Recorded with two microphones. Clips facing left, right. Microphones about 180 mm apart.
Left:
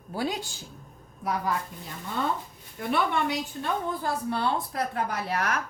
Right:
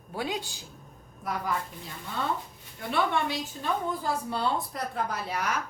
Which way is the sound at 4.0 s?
60° left (ahead or behind).